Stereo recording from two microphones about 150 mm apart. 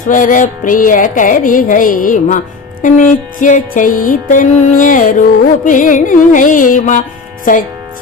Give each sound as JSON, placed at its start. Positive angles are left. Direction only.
{"t": 0.1, "sound": "music", "side_deg": 65}